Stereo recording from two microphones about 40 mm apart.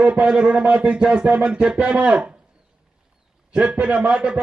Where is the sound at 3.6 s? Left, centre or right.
Right.